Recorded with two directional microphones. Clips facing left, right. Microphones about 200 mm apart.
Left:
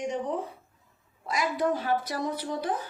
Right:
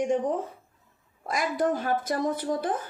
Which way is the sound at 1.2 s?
50° right (ahead or behind).